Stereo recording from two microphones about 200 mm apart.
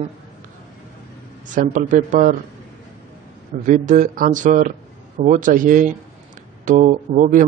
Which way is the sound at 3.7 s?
40° right (ahead or behind).